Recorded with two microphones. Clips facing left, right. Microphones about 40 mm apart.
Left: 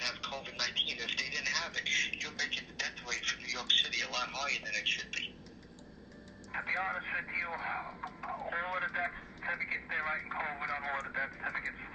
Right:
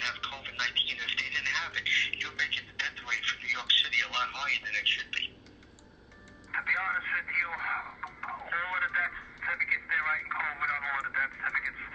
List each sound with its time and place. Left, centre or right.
0.0 s telephone: right
6.5 s speech: right
8.4 s speech: right
9.4 s telephone: right
10.6 s speech: right